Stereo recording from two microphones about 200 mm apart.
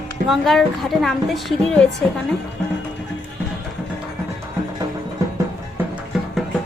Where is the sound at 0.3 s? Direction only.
Centre (ahead or behind).